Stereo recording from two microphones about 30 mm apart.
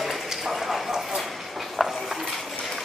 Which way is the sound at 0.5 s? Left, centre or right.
Centre.